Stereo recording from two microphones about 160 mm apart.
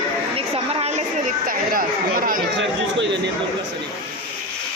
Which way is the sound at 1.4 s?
60° right (ahead or behind).